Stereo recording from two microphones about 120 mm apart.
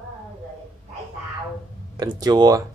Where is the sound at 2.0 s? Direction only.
35° right (ahead or behind).